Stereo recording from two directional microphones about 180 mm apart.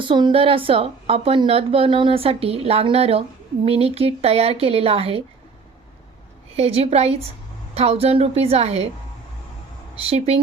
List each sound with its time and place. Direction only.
0.0 s a woman's voice: 25° right (ahead or behind)
6.6 s a woman's voice: 35° right (ahead or behind)
10.0 s a woman's voice: 35° right (ahead or behind)